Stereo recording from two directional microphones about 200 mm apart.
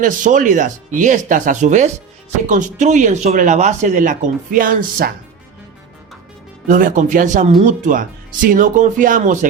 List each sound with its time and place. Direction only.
0.0 s speech: 40° right (ahead or behind)
6.7 s speech: 40° right (ahead or behind)